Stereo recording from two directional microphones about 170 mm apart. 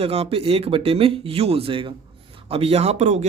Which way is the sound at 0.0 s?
35° right (ahead or behind).